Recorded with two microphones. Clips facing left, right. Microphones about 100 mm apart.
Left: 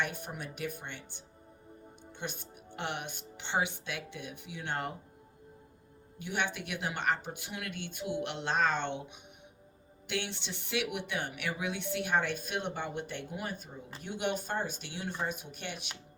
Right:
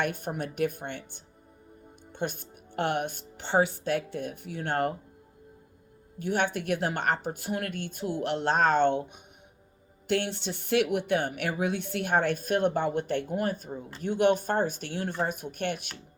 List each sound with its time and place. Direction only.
0.0 s speech: 50° right (ahead or behind)
6.1 s speech: 45° right (ahead or behind)
10.1 s speech: 45° right (ahead or behind)